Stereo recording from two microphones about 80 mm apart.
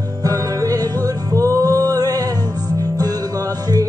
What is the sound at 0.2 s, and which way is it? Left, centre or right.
Music, right.